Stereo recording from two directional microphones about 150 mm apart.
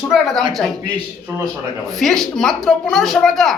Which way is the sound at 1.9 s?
Centre (ahead or behind).